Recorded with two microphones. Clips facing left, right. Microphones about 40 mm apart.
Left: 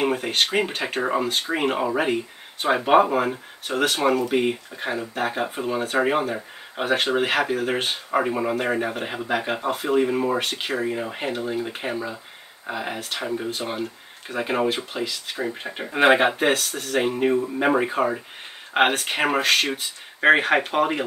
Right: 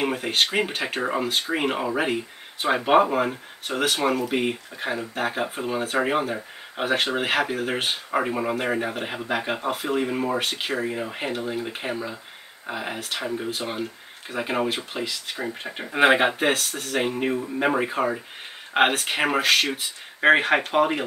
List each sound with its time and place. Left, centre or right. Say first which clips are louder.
0.0 s speech: left 1 dB; centre